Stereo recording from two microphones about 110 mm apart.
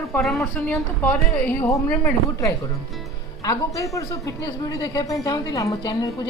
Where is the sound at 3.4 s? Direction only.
30° left (ahead or behind).